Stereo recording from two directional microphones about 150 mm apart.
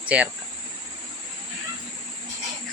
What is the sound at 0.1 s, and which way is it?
Speech, 10° right (ahead or behind).